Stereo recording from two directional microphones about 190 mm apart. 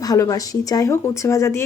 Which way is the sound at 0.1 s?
20° left (ahead or behind).